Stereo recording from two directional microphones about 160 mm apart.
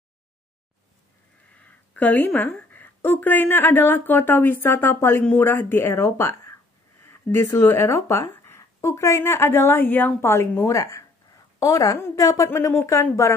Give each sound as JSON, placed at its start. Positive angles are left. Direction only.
{"t": 1.6, "sound": "a woman's voice", "side_deg": 10}